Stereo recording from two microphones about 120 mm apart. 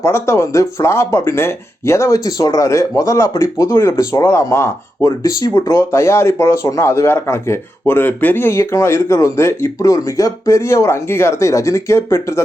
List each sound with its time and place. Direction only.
0.0 s speech: 20° left (ahead or behind)